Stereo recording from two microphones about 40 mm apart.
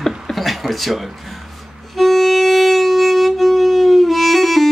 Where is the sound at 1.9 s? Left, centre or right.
Centre.